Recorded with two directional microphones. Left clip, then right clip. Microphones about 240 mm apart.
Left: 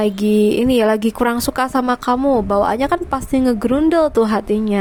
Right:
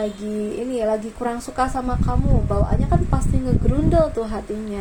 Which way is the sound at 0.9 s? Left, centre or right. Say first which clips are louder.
Left 6 dB; left.